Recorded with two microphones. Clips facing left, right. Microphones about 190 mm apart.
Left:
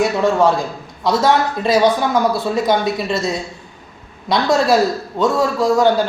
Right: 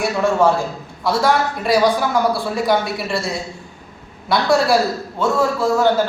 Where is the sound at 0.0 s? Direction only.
15° left (ahead or behind).